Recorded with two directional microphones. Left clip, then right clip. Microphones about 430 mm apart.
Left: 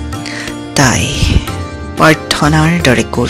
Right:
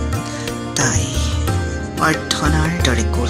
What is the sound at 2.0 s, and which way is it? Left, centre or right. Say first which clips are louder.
Speech: left 8 dB; centre.